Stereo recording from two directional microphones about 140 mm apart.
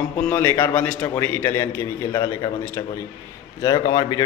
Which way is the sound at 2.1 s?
25° left (ahead or behind).